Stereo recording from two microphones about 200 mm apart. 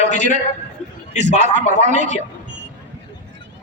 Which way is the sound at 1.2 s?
35° right (ahead or behind).